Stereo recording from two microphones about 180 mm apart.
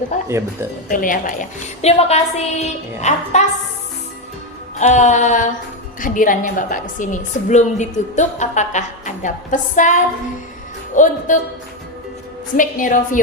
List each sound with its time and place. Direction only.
0.3 s speech: 15° right (ahead or behind)
0.9 s a woman's voice: 50° left (ahead or behind)
1.8 s a woman's voice: 35° left (ahead or behind)
4.8 s a woman's voice: 40° left (ahead or behind)
12.5 s a woman's voice: 50° left (ahead or behind)